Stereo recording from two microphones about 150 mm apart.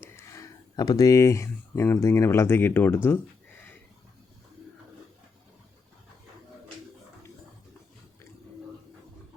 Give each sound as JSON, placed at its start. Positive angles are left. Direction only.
{"t": 0.0, "sound": "speech", "side_deg": 20}